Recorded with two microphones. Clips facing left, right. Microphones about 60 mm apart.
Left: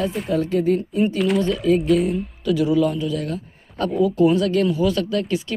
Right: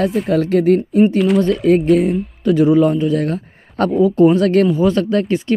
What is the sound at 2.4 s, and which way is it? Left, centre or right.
A man's voice, right.